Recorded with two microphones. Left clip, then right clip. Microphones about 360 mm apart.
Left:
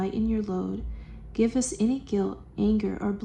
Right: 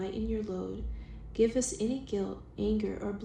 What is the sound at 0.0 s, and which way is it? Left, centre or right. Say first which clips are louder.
A woman's voice: left 6 dB; left.